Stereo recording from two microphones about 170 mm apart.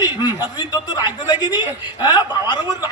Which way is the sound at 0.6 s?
25° left (ahead or behind).